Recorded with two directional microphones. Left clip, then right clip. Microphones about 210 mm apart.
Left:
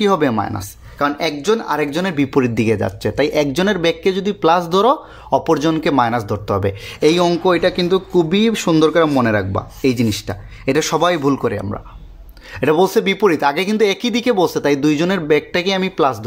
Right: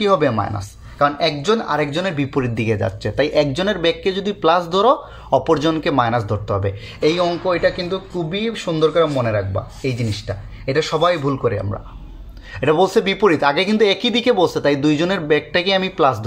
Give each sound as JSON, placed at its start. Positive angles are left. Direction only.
{"t": 0.0, "sound": "speech", "side_deg": 35}
{"t": 12.5, "sound": "speech", "side_deg": 20}